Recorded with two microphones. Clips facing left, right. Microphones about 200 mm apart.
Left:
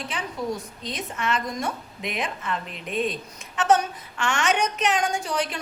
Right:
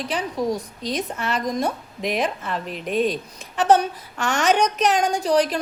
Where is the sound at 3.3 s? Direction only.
35° right (ahead or behind).